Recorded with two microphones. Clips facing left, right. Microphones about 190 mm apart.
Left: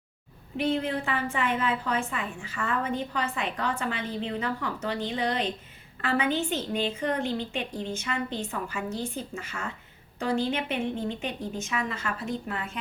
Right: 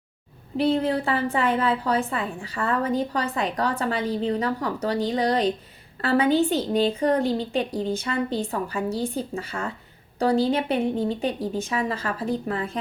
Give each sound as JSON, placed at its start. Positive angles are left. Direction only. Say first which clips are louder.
{"t": 0.5, "sound": "a woman's voice", "louder": "right 5 dB", "side_deg": -35}